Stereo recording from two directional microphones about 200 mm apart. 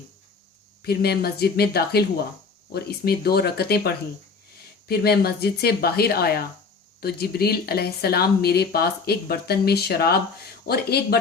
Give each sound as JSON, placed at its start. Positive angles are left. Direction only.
{"t": 0.8, "sound": "speech", "side_deg": 50}